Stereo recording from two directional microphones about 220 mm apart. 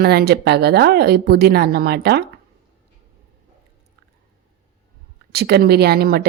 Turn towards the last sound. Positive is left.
turn(degrees=-45)  # may be behind; listen again after turning